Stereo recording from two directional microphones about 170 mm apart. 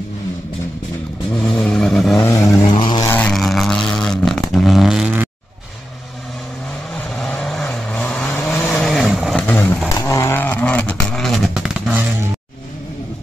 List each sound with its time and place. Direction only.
1.5 s vehicle: 5° left (ahead or behind)
2.1 s vehicle: 15° left (ahead or behind)
2.8 s vehicle: 25° left (ahead or behind)
3.1 s vehicle: 5° left (ahead or behind)
7.2 s vehicle: 5° left (ahead or behind)
10.0 s a sound: 15° left (ahead or behind); by 12.0 s 5° right (ahead or behind)